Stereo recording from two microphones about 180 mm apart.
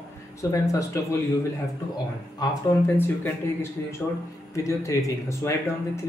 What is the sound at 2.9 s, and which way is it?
Speech, 10° left (ahead or behind).